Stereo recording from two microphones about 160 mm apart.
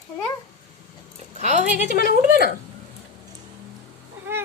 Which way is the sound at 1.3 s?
45° right (ahead or behind).